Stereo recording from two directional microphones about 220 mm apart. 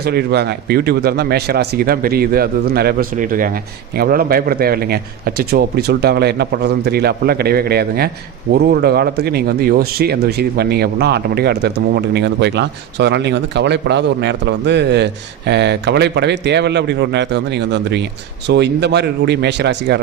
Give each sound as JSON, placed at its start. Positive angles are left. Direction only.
{"t": 0.0, "sound": "speech", "side_deg": -45}